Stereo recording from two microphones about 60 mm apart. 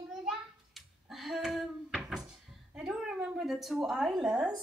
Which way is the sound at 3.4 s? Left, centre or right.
Centre.